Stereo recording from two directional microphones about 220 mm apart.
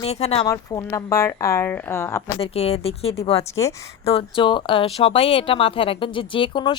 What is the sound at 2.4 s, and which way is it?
Speech, 25° left (ahead or behind).